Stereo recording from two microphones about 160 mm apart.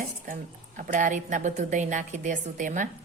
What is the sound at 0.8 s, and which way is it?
A woman's voice, 55° right (ahead or behind).